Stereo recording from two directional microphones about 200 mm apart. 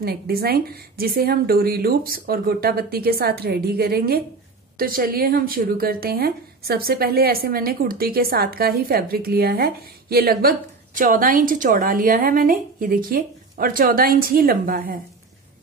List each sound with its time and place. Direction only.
0.0 s a woman's voice: 50° right (ahead or behind)